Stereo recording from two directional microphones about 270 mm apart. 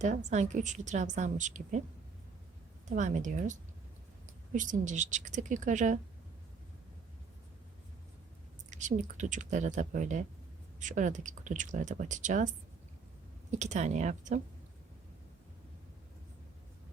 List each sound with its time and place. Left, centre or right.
0.0 s a woman's voice: right
2.9 s a woman's voice: right
8.7 s a woman's voice: right
13.5 s a woman's voice: right